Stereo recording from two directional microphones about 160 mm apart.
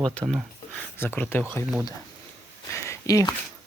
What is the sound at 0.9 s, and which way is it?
Speech, 15° left (ahead or behind).